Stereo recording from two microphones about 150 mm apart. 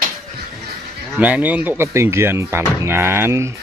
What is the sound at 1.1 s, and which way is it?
Speech, 10° right (ahead or behind).